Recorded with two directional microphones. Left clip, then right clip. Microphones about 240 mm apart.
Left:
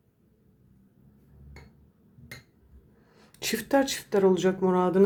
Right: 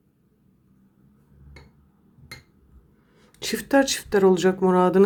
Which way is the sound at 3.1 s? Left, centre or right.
Centre.